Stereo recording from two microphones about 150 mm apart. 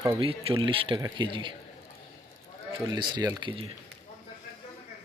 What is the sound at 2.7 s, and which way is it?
Speech, 30° right (ahead or behind).